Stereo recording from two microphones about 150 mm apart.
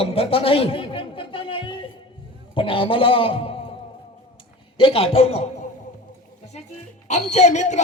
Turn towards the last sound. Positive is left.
turn(degrees=50)  # may be behind; listen again after turning